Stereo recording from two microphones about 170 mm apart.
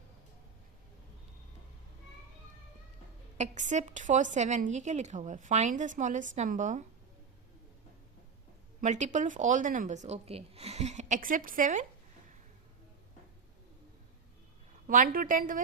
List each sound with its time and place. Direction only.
3.3 s a woman's voice: 45° right (ahead or behind)
8.8 s a woman's voice: 45° right (ahead or behind)
14.8 s a woman's voice: 55° right (ahead or behind)